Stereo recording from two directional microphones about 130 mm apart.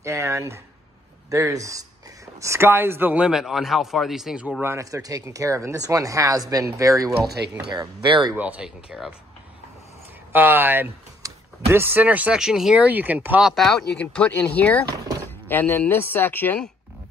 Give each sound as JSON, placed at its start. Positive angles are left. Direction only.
{"t": 0.0, "sound": "speech", "side_deg": -25}
{"t": 8.4, "sound": "speech", "side_deg": -10}
{"t": 10.3, "sound": "a woman's voice", "side_deg": -15}